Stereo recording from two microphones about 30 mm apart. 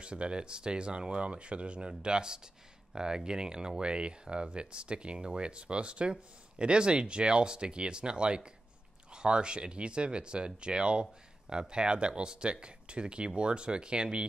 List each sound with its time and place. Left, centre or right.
0.0 s speech: right